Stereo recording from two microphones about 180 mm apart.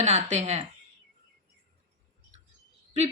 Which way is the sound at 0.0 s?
40° right (ahead or behind).